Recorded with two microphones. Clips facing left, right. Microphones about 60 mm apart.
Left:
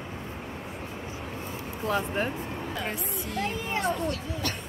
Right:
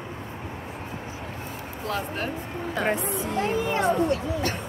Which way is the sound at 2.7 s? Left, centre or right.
Right.